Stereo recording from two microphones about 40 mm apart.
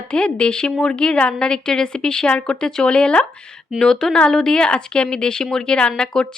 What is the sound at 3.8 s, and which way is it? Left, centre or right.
A woman's voice, centre.